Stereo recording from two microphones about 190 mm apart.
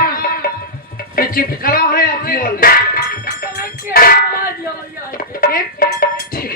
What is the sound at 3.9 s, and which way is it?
Child singing, 50° left (ahead or behind).